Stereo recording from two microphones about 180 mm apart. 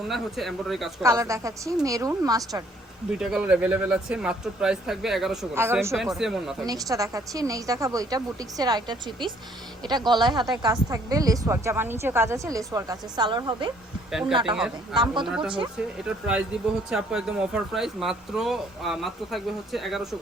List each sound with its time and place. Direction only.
0.1 s speech: centre (ahead or behind)
1.0 s a woman's voice: 15° right (ahead or behind)
3.1 s speech: 5° right (ahead or behind)
5.5 s a woman's voice: 15° right (ahead or behind)
5.9 s speech: centre (ahead or behind)
6.7 s a woman's voice: 20° right (ahead or behind)
14.1 s speech: centre (ahead or behind)
14.9 s a woman's voice: 25° right (ahead or behind)
15.3 s speech: 5° right (ahead or behind)